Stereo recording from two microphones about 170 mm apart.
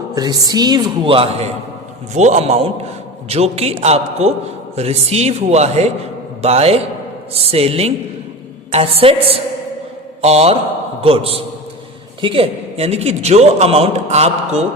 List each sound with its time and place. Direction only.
0.1 s a man's voice: 20° right (ahead or behind)
10.2 s a man's voice: 40° right (ahead or behind)